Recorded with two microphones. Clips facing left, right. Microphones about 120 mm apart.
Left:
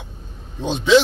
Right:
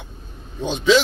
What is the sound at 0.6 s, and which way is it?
Speech, 30° left (ahead or behind).